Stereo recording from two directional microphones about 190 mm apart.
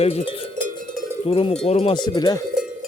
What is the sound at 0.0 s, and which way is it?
Cowbell, 30° left (ahead or behind).